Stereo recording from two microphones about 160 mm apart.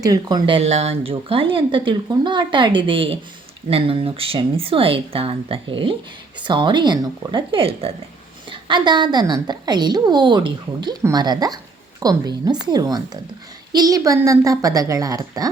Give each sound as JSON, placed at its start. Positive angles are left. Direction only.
{"t": 0.0, "sound": "a woman's voice", "side_deg": -25}